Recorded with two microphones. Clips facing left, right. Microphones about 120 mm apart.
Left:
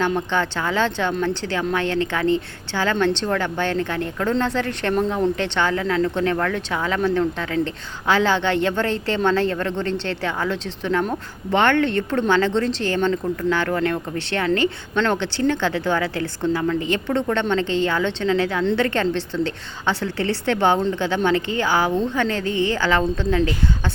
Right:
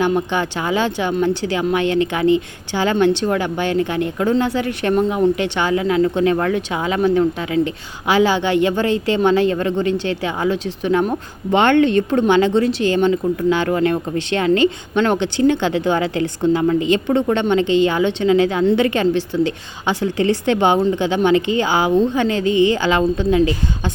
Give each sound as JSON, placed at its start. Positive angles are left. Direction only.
{"t": 0.0, "sound": "speech", "side_deg": -15}